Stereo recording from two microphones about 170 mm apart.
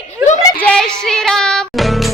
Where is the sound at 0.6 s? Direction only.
5° left (ahead or behind).